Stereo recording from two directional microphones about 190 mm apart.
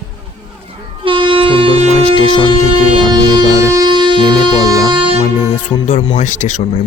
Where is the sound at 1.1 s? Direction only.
25° right (ahead or behind).